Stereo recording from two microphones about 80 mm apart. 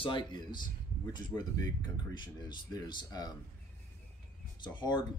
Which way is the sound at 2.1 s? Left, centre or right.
Left.